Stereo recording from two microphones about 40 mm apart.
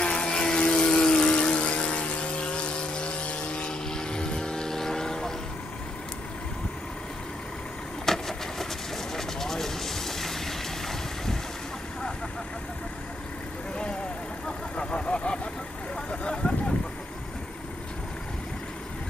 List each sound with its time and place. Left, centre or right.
0.0 s a sound: left
0.7 s vehicle: centre
3.9 s vehicle: centre
8.0 s vehicle: centre
14.8 s vehicle: left
16.1 s a sound: left